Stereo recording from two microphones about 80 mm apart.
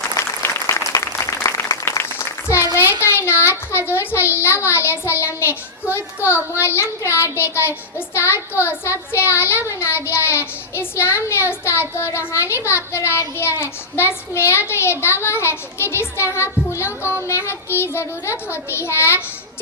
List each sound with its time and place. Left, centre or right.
0.2 s applause: left
3.0 s child singing: left